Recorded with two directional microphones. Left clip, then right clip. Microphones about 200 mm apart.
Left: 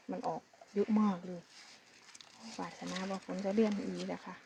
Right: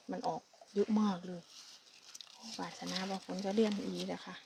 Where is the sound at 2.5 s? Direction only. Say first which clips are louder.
Right 1 dB; centre (ahead or behind).